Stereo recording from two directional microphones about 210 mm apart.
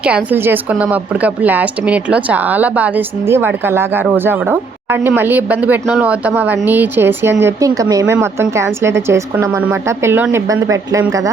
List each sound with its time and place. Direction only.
0.0 s speech: 5° right (ahead or behind)